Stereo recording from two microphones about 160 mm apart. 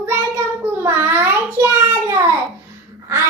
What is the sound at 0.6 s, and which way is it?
Child singing, 15° right (ahead or behind).